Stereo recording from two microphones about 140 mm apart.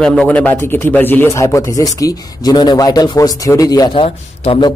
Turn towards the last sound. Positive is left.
turn(degrees=40)  # may be behind; listen again after turning